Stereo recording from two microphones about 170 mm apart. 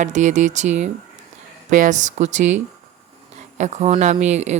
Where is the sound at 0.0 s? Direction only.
45° right (ahead or behind).